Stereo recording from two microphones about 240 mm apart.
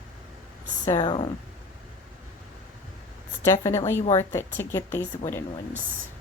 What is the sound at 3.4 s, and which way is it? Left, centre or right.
A woman's voice, centre.